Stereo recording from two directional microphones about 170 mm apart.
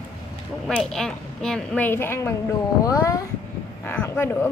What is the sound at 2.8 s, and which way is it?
Speech, 20° left (ahead or behind).